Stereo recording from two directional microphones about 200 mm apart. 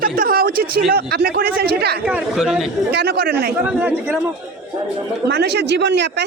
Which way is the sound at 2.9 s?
55° right (ahead or behind).